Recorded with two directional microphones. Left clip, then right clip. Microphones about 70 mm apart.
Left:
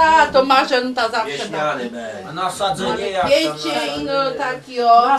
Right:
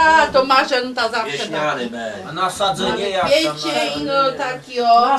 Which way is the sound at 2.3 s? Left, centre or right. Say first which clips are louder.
Right 1 dB; centre.